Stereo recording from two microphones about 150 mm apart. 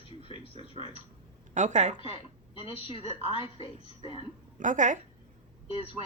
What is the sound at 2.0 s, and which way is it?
A woman's voice, 40° left (ahead or behind).